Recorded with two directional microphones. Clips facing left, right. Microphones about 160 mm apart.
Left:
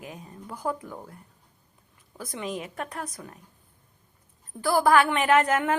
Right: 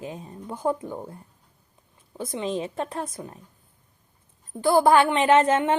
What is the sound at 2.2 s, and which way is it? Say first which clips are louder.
A woman's voice: right 5 dB; 25° right (ahead or behind).